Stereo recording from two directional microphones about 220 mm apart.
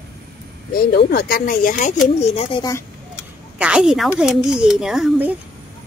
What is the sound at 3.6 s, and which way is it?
A woman's voice, 5° right (ahead or behind).